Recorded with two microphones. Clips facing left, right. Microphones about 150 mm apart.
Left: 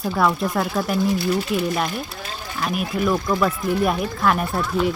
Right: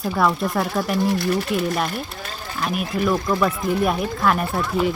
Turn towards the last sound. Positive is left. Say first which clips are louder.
# even
turn(degrees=0)  # may be behind; listen again after turning